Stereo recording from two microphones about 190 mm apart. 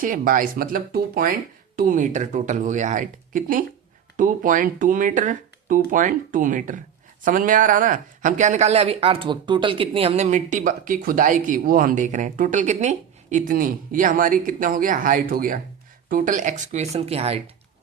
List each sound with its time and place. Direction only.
0.0 s speech: 45° right (ahead or behind)